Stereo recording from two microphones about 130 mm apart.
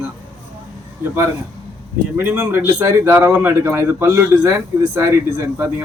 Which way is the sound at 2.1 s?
15° right (ahead or behind).